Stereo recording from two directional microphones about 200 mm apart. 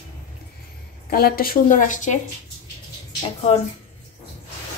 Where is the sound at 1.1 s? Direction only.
50° left (ahead or behind).